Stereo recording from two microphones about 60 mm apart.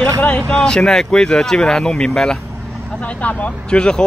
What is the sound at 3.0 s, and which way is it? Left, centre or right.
Speech, left.